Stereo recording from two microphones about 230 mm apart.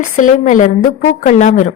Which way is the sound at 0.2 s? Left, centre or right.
Left.